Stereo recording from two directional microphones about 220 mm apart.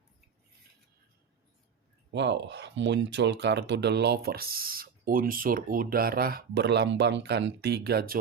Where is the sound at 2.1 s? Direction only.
55° right (ahead or behind).